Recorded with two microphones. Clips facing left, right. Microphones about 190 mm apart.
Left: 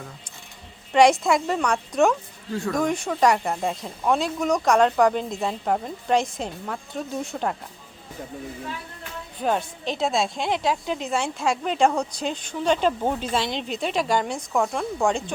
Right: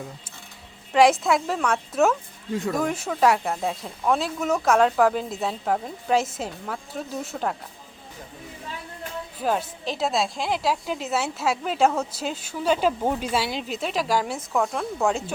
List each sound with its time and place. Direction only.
0.9 s a woman's voice: centre (ahead or behind)
2.5 s speech: 20° right (ahead or behind)
2.7 s a woman's voice: 5° right (ahead or behind)
9.4 s a woman's voice: 5° right (ahead or behind)